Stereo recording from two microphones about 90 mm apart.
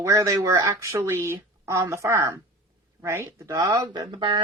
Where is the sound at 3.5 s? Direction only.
40° right (ahead or behind); by 4.4 s 60° right (ahead or behind).